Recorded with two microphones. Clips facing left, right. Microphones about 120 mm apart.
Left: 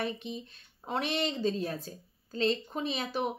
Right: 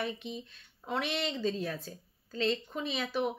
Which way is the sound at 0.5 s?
40° left (ahead or behind).